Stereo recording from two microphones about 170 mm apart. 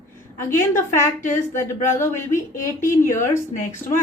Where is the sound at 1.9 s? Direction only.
15° left (ahead or behind).